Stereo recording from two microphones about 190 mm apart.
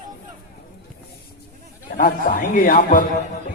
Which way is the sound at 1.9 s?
45° left (ahead or behind).